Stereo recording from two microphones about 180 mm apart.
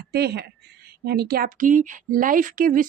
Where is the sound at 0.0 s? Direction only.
65° right (ahead or behind).